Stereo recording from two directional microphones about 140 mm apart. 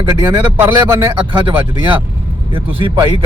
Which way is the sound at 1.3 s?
35° right (ahead or behind).